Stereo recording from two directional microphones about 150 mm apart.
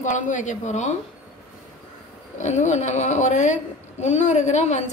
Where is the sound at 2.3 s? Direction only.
55° left (ahead or behind).